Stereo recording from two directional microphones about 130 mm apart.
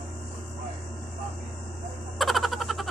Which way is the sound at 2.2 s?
Centre (ahead or behind).